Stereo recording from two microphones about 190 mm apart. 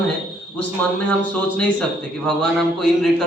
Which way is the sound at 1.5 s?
5° left (ahead or behind).